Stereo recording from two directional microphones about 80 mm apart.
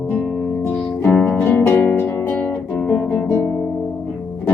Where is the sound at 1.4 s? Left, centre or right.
Left.